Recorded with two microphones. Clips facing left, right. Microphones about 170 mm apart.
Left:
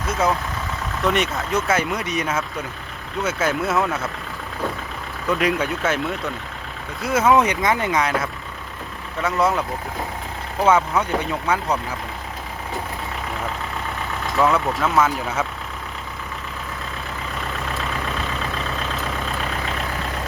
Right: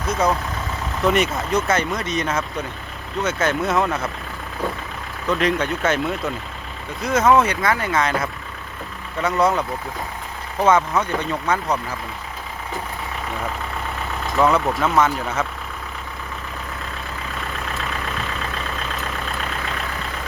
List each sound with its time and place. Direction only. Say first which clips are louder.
0.1 s speech: right 1 dB; centre (ahead or behind)
5.3 s speech: right 1 dB; 5° left (ahead or behind)
9.2 s speech: right 1 dB; centre (ahead or behind)
10.7 s speech: even; 5° left (ahead or behind)
14.3 s speech: right 1 dB; centre (ahead or behind)